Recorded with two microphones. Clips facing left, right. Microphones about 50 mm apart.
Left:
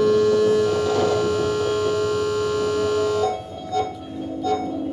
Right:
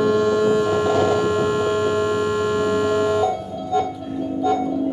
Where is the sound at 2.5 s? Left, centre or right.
Right.